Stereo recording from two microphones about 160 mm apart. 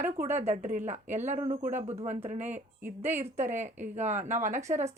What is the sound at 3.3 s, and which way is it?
Speech, 50° right (ahead or behind).